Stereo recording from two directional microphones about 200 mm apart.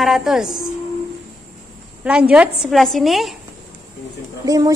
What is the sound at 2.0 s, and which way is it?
A woman's voice, 5° right (ahead or behind).